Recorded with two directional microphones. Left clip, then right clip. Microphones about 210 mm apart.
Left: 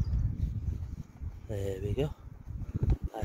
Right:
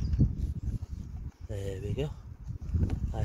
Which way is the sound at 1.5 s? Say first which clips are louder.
Left 3 dB; centre (ahead or behind).